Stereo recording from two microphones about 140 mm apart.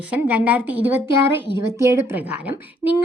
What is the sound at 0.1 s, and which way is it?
A woman's voice, 10° right (ahead or behind).